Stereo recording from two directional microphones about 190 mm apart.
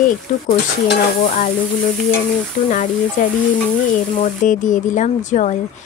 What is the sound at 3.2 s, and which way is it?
Speech, 40° left (ahead or behind).